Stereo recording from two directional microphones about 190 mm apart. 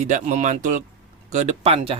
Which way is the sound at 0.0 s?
40° right (ahead or behind).